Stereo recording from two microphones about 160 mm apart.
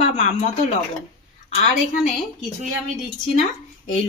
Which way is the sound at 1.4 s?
45° left (ahead or behind).